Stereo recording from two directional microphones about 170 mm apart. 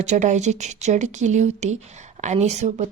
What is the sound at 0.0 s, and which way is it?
Speech, 45° right (ahead or behind).